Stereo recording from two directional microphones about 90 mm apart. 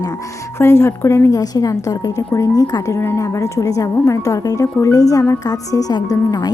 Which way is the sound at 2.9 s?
30° left (ahead or behind).